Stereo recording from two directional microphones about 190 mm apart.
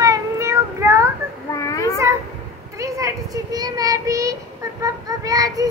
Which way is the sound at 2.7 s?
15° right (ahead or behind).